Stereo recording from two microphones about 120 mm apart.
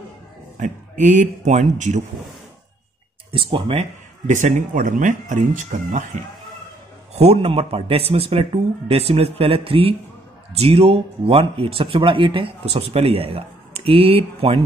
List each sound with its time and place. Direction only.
0.6 s speech: 90° right
3.3 s speech: 50° right (ahead or behind)
4.3 s speech: 90° right
7.2 s speech: 55° right (ahead or behind)